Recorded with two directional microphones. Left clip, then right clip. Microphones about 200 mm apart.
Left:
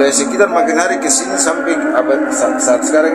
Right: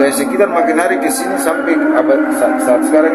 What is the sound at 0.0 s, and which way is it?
A man's voice, centre (ahead or behind).